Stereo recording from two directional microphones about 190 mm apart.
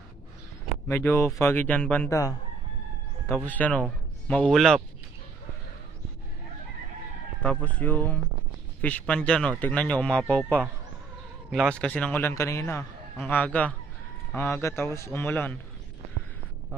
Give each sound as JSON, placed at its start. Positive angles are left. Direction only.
{"t": 0.8, "sound": "a man's voice", "side_deg": 15}
{"t": 3.4, "sound": "a man's voice", "side_deg": 10}
{"t": 7.4, "sound": "a man's voice", "side_deg": 10}